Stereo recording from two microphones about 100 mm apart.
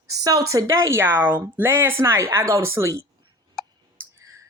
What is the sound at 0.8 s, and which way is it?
A woman's voice, 25° right (ahead or behind).